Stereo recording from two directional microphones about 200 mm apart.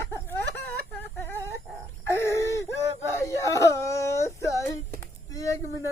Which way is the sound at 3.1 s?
15° left (ahead or behind).